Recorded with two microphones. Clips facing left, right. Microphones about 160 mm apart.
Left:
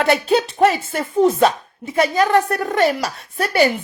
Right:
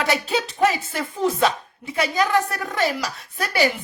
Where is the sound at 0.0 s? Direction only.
55° left (ahead or behind).